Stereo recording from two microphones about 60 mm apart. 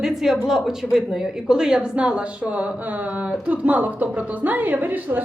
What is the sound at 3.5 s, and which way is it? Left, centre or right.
A woman's voice, right.